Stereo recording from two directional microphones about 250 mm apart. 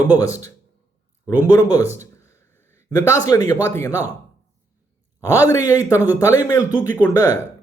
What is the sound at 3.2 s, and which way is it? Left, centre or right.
Speech, centre.